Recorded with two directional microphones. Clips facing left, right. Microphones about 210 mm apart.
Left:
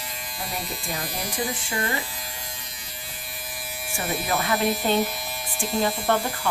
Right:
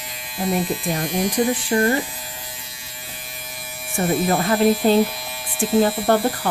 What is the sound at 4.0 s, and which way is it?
Speech, 50° right (ahead or behind).